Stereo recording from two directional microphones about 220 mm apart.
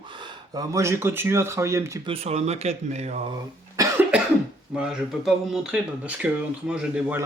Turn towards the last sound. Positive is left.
turn(degrees=-5)  # may be behind; listen again after turning